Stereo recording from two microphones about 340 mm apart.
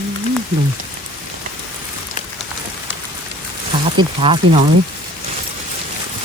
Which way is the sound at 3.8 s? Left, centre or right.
Centre.